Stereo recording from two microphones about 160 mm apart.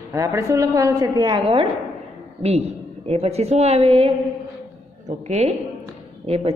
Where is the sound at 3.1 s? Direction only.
40° right (ahead or behind).